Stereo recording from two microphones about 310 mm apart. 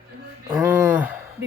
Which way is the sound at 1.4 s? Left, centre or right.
Right.